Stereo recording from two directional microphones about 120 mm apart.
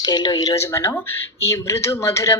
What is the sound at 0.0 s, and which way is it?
Speech, 35° left (ahead or behind).